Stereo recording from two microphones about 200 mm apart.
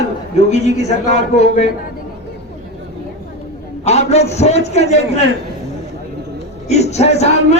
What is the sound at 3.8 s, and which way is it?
A man's voice, 35° left (ahead or behind).